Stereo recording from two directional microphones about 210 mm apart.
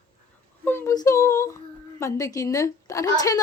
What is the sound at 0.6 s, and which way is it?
A woman's voice, 10° left (ahead or behind).